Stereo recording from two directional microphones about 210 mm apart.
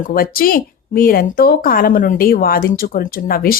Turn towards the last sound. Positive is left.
turn(degrees=45)  # may be behind; listen again after turning